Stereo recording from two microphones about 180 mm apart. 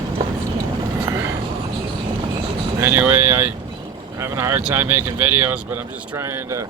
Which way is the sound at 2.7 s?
15° right (ahead or behind).